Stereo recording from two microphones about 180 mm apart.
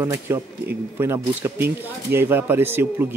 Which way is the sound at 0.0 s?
15° right (ahead or behind).